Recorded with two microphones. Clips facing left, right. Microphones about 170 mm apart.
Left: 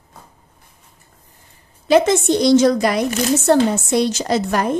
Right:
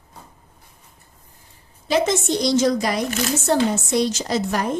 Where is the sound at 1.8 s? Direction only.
60° left (ahead or behind).